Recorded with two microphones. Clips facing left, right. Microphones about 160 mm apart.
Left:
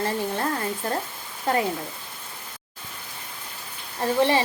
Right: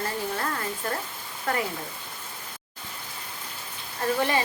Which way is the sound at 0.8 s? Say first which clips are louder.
Left 3 dB; 30° left (ahead or behind).